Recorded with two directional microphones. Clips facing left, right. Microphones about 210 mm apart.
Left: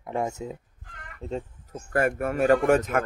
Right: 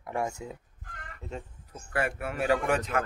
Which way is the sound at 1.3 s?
45° left (ahead or behind).